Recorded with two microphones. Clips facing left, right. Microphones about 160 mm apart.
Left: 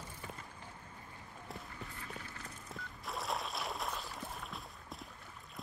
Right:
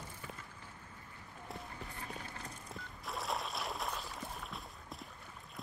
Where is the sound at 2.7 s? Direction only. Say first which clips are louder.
Left 1 dB; centre (ahead or behind).